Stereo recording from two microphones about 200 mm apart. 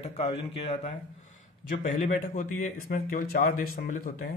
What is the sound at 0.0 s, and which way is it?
A man's voice, 30° left (ahead or behind).